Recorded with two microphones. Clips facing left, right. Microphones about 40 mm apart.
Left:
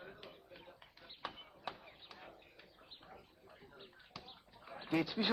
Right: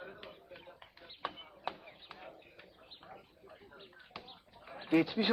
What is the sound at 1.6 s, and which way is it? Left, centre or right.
Chop, right.